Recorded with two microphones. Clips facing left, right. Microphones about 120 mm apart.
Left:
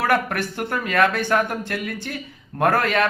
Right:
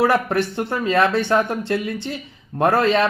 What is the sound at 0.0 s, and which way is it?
A man's voice, 25° right (ahead or behind).